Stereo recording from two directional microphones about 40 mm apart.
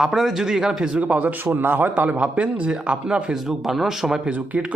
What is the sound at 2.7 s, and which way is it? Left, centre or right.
Speech, right.